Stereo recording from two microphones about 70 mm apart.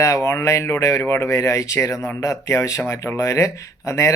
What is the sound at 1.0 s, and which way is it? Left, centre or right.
Speech, left.